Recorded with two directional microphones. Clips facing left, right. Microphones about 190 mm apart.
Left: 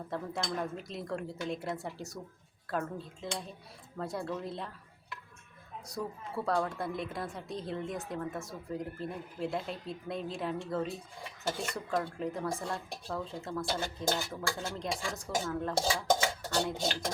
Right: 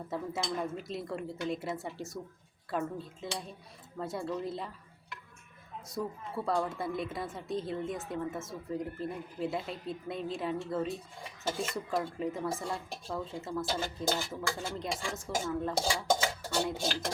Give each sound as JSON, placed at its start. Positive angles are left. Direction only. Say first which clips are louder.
{"t": 0.1, "sound": "a woman's voice", "louder": "right 1 dB", "side_deg": 0}
{"t": 5.9, "sound": "a woman's voice", "louder": "right 1 dB", "side_deg": 0}